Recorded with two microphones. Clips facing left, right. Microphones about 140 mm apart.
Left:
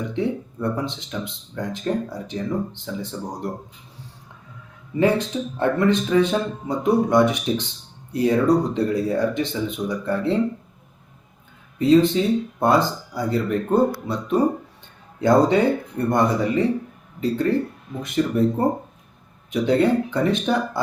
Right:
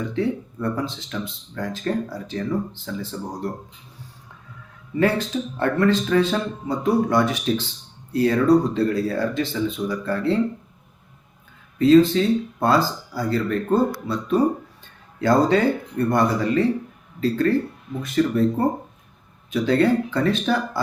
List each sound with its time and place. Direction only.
0.0 s speech: 20° left (ahead or behind)
4.9 s speech: 20° left (ahead or behind)
11.8 s speech: 20° left (ahead or behind)
19.5 s speech: 20° left (ahead or behind)